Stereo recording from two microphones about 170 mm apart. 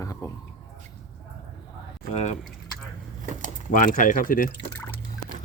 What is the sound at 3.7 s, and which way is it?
Speech, 50° left (ahead or behind).